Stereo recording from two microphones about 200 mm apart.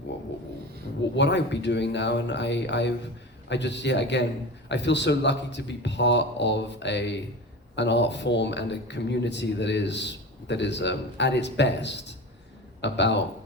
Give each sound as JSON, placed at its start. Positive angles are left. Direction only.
{"t": 1.1, "sound": "speech", "side_deg": 60}